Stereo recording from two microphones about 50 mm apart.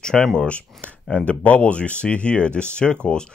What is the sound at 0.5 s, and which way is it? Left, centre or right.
Speech, left.